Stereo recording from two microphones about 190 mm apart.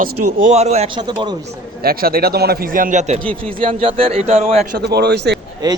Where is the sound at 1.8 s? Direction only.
50° right (ahead or behind).